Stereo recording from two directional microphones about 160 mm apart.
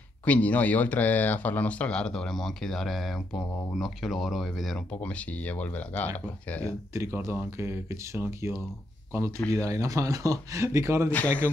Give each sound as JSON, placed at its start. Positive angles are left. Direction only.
{"t": 0.2, "sound": "speech", "side_deg": 10}
{"t": 6.9, "sound": "speech", "side_deg": -15}
{"t": 11.1, "sound": "speech", "side_deg": 10}